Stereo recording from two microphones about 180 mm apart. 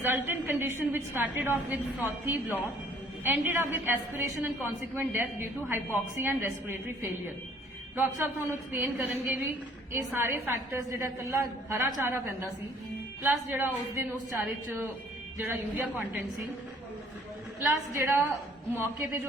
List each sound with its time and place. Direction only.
0.0 s a woman's voice: 10° right (ahead or behind)
13.5 s a woman's voice: 15° right (ahead or behind)
17.9 s a woman's voice: 15° right (ahead or behind)